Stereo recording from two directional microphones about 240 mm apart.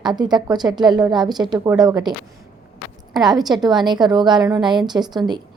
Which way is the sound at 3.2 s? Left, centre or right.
Centre.